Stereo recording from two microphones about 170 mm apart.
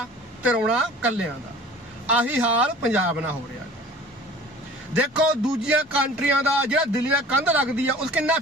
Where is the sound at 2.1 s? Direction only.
10° right (ahead or behind).